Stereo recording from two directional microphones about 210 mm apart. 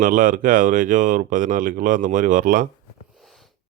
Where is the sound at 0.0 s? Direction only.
40° right (ahead or behind).